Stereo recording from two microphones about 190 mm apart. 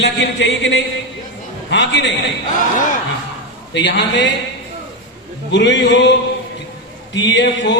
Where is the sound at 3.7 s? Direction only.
70° left (ahead or behind).